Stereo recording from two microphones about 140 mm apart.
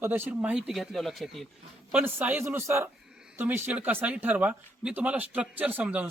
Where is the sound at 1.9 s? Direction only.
10° right (ahead or behind).